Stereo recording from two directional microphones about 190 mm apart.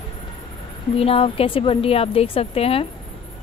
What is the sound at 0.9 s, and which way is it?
A woman's voice, 30° left (ahead or behind).